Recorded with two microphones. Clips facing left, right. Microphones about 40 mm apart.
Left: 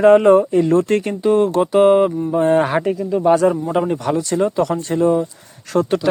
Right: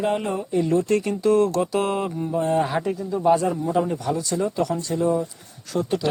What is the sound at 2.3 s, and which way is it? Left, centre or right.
A man's voice, left.